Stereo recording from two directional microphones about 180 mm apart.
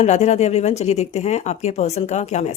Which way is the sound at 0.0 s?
40° left (ahead or behind).